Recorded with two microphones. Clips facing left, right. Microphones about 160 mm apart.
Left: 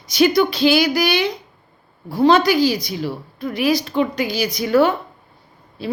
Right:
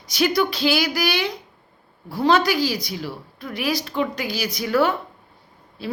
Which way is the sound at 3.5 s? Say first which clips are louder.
Left 5 dB; centre (ahead or behind).